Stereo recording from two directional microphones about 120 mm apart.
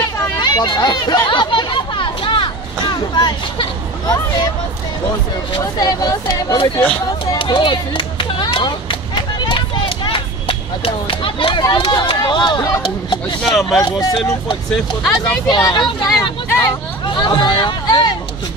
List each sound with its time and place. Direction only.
0.0 s chatter: 35° left (ahead or behind)
5.6 s speech: 30° left (ahead or behind)
9.4 s vehicle: 45° left (ahead or behind)
11.1 s speech: 45° left (ahead or behind)
13.4 s speech: centre (ahead or behind)
13.7 s speech: 35° left (ahead or behind)
15.4 s speech: 40° left (ahead or behind)
16.4 s hubbub: 20° left (ahead or behind)
17.1 s hubbub: 40° left (ahead or behind)